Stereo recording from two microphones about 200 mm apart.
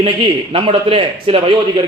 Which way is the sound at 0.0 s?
25° right (ahead or behind).